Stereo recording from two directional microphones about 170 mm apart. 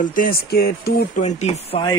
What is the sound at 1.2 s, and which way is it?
Speech, 40° left (ahead or behind).